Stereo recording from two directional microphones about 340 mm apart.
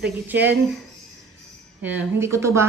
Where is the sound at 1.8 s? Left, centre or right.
Centre.